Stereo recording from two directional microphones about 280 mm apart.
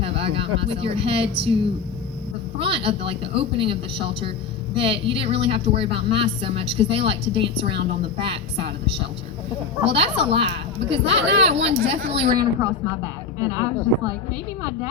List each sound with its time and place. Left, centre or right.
0.2 s speech: centre
2.6 s speech: centre
9.8 s speech: right
11.1 s speech: right
11.4 s speech: right